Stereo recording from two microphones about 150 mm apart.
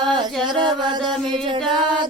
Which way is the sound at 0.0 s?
30° right (ahead or behind).